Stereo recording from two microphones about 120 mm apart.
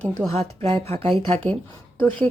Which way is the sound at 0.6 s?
55° right (ahead or behind).